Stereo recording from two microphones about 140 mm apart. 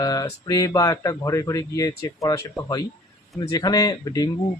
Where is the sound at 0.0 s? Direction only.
25° left (ahead or behind).